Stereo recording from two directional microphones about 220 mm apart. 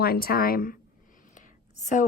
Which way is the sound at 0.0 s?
45° left (ahead or behind).